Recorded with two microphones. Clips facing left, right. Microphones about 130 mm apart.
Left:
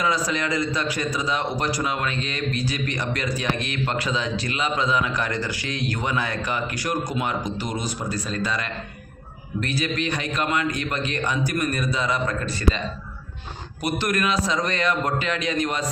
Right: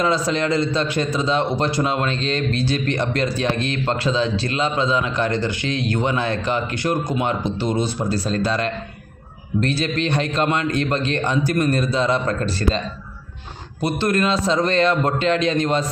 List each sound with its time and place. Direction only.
0.0 s a man's voice: 30° right (ahead or behind)
13.8 s a man's voice: 30° right (ahead or behind)